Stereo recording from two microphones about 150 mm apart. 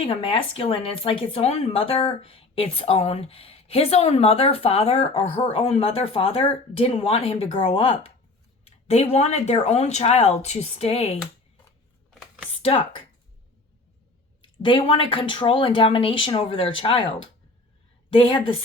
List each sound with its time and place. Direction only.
0.0 s speech: 40° left (ahead or behind)
9.1 s speech: 45° left (ahead or behind)
12.5 s computer keyboard: 40° left (ahead or behind)
14.4 s speech: 30° left (ahead or behind)